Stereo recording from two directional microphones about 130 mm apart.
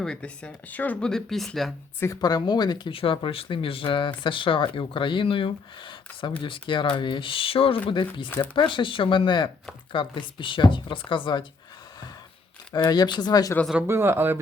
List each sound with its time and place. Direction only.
0.0 s speech: 10° left (ahead or behind)
2.2 s speech: 30° left (ahead or behind)
12.7 s speech: 30° left (ahead or behind)
13.8 s speech: 20° right (ahead or behind)